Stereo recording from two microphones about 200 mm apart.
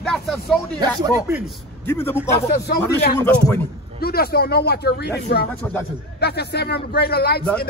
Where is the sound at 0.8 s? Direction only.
20° right (ahead or behind).